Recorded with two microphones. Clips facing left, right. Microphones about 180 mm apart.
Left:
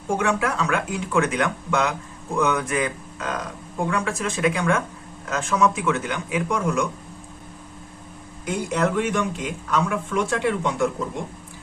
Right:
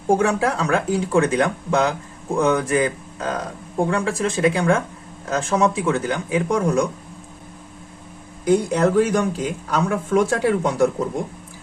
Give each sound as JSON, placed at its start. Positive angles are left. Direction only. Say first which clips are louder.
{"t": 0.1, "sound": "speech", "louder": "right 5 dB", "side_deg": -35}
{"t": 8.4, "sound": "speech", "louder": "right 6 dB", "side_deg": -35}